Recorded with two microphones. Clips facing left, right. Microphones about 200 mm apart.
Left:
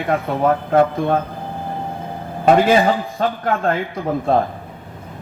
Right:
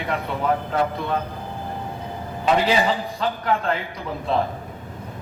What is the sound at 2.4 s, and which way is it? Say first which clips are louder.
A man's voice: left 6 dB; 50° left (ahead or behind).